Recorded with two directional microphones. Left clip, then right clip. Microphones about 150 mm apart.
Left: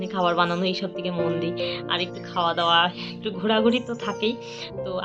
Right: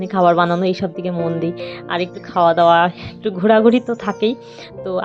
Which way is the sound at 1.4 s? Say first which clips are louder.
Right 3 dB; 50° right (ahead or behind).